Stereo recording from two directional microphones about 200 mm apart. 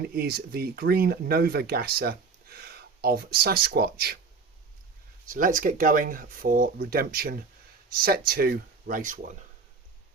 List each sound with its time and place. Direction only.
0.2 s speech: 50° right (ahead or behind)
5.3 s speech: 40° right (ahead or behind)